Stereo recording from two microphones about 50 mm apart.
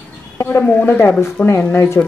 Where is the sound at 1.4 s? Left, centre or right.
Left.